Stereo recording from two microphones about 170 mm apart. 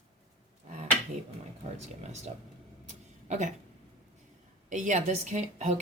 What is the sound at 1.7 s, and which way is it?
Speech, 40° right (ahead or behind).